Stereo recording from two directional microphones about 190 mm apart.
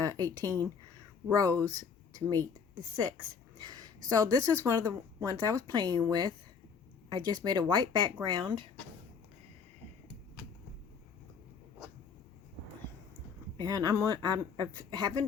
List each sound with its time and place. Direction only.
0.0 s speech: 20° right (ahead or behind)
3.6 s a sound: 20° right (ahead or behind)
4.1 s speech: 20° right (ahead or behind)
13.6 s speech: 20° right (ahead or behind)